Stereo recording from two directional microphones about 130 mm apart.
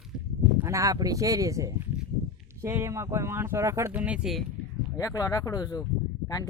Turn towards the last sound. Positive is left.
turn(degrees=30)  # may be behind; listen again after turning